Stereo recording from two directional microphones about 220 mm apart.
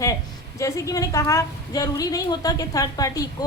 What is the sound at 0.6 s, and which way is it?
A woman's voice, 15° left (ahead or behind).